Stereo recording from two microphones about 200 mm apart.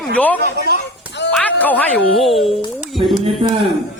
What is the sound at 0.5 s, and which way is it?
Speech, 55° right (ahead or behind).